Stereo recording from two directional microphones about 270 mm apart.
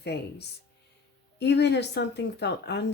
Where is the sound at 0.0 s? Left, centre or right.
Left.